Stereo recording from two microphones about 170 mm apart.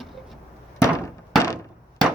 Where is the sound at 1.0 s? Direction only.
20° left (ahead or behind).